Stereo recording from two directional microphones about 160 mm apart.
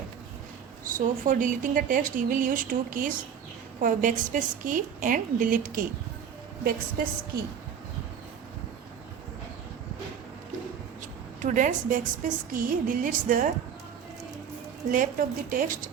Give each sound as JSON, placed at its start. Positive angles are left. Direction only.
{"t": 0.9, "sound": "a woman's voice", "side_deg": -55}
{"t": 7.0, "sound": "a woman's voice", "side_deg": -65}
{"t": 11.4, "sound": "a woman's voice", "side_deg": -55}
{"t": 14.9, "sound": "a woman's voice", "side_deg": -55}